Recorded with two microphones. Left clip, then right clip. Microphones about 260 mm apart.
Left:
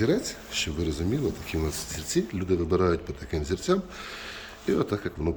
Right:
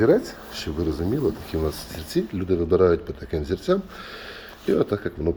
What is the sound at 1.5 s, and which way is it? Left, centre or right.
Speech, centre.